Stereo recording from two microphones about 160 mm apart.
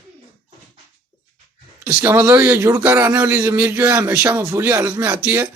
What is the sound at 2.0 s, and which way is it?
A man's voice, 20° right (ahead or behind).